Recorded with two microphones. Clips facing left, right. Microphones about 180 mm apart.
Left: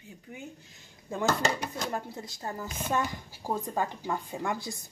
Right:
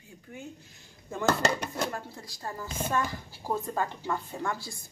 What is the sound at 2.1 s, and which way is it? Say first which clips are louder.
A woman's voice: left 2 dB; 20° left (ahead or behind).